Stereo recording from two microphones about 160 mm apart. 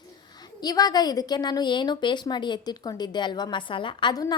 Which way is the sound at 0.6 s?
25° left (ahead or behind).